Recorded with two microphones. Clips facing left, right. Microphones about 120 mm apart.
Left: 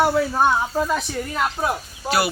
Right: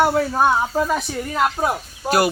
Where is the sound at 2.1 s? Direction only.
45° right (ahead or behind).